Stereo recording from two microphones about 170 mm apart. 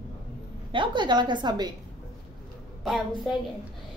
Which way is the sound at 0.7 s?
30° right (ahead or behind).